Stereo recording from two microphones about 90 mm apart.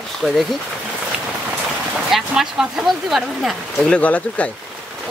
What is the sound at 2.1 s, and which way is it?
Speech, 5° right (ahead or behind).